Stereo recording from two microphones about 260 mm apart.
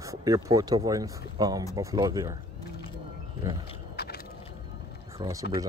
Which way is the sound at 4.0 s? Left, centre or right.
Left.